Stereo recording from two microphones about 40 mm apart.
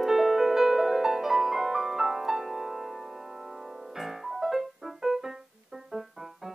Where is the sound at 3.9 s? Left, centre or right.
Centre.